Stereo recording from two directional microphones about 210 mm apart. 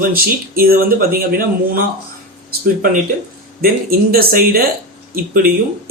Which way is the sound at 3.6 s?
45° right (ahead or behind).